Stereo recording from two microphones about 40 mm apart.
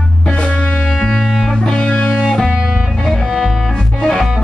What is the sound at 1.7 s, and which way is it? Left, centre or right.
Music, left.